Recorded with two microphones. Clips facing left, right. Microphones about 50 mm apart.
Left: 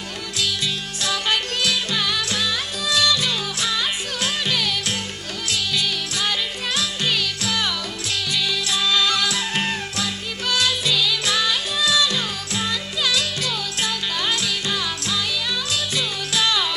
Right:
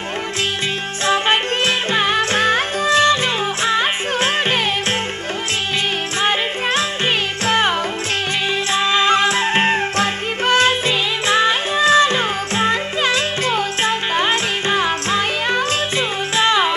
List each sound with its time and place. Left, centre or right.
1.0 s music: right
6.2 s music: right
8.7 s music: right